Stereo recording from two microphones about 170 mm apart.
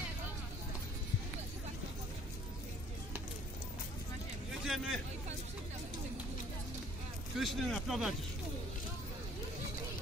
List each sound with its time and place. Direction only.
4.6 s speech: centre (ahead or behind)
7.3 s speech: centre (ahead or behind)